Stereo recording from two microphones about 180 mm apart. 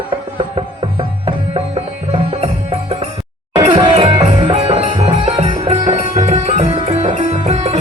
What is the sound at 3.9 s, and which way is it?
Music, 35° right (ahead or behind).